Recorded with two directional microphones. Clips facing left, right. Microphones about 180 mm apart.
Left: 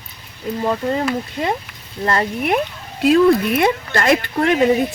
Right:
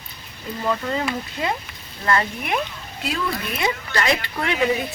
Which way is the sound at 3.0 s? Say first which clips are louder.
Left 14 dB; 55° left (ahead or behind).